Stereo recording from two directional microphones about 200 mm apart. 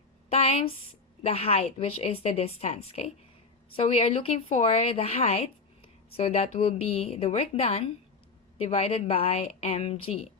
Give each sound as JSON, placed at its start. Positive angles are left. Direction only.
{"t": 0.3, "sound": "a woman's voice", "side_deg": 30}